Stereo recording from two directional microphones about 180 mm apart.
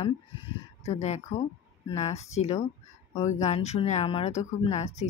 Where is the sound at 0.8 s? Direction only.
40° left (ahead or behind).